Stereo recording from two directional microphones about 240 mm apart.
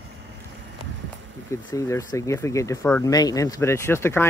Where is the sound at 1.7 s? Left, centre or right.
Centre.